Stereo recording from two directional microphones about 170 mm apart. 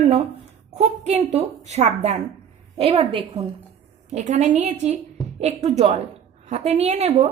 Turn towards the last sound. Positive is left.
turn(degrees=-40)  # may be behind; listen again after turning